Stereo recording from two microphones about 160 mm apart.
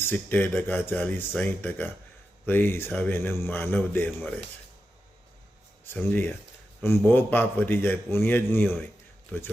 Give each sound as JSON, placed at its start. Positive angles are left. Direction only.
{"t": 0.0, "sound": "a man's voice", "side_deg": 10}
{"t": 5.8, "sound": "a man's voice", "side_deg": 10}